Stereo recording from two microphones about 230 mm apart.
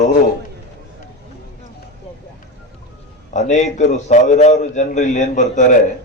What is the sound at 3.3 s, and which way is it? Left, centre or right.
A man's voice, left.